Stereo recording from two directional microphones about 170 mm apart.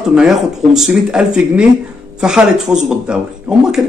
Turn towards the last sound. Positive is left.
turn(degrees=-5)  # may be behind; listen again after turning